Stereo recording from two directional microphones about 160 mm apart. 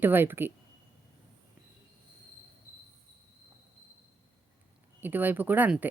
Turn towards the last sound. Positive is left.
turn(degrees=-10)  # may be behind; listen again after turning